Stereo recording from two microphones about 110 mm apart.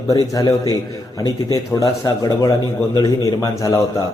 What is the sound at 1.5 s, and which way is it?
A man's voice, 35° left (ahead or behind).